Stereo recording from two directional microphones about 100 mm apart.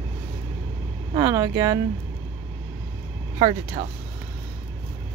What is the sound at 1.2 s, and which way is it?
Speech, 35° right (ahead or behind).